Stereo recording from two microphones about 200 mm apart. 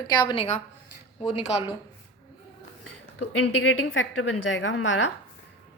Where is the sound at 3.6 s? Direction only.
75° left (ahead or behind).